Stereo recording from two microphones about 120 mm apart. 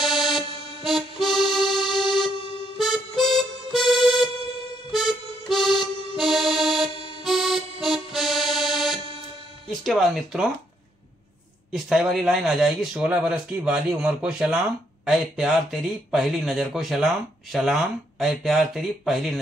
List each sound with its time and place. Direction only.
0.0 s music: centre (ahead or behind)
5.5 s music: centre (ahead or behind)
9.7 s speech: 5° left (ahead or behind)
11.7 s speech: 5° right (ahead or behind)